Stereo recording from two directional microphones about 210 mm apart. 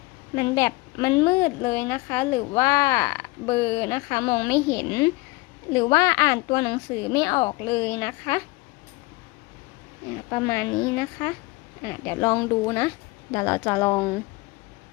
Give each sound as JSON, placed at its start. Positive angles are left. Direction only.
{"t": 0.3, "sound": "a woman's voice", "side_deg": 15}
{"t": 10.2, "sound": "a woman's voice", "side_deg": 15}